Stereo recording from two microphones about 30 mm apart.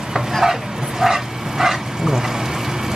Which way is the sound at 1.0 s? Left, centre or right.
Centre.